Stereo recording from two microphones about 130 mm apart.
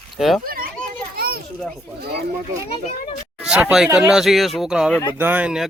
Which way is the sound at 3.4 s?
10° right (ahead or behind).